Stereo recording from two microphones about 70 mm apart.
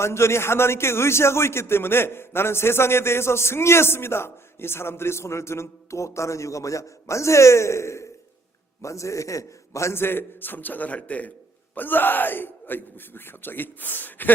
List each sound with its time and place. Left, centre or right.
0.0 s a man's voice: left